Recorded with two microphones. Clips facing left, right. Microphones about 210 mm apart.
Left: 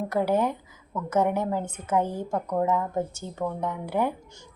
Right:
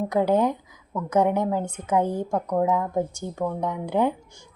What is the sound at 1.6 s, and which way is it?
Speech, 5° left (ahead or behind).